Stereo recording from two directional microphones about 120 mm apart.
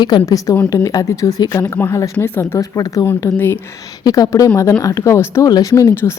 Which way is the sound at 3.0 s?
20° left (ahead or behind).